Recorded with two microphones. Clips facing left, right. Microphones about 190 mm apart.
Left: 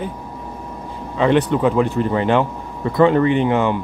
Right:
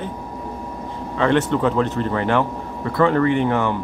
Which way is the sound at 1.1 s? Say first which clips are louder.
Left 2 dB; 15° left (ahead or behind).